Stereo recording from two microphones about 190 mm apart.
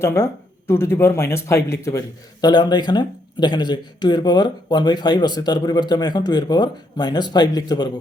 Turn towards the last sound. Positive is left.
turn(degrees=20)  # may be behind; listen again after turning